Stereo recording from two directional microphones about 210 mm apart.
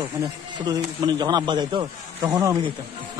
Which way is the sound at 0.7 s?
20° right (ahead or behind).